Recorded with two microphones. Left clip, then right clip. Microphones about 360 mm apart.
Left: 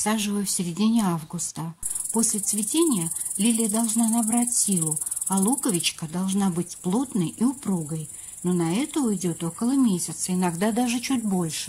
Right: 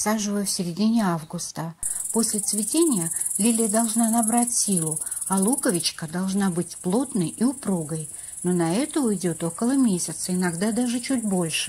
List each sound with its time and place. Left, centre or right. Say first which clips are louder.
0.0 s speech: right 1 dB; centre